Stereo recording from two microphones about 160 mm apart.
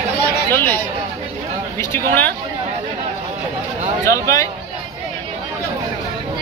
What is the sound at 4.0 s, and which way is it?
Speech, 20° left (ahead or behind).